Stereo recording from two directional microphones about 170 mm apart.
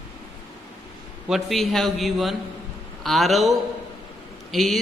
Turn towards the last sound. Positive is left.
turn(degrees=0)  # may be behind; listen again after turning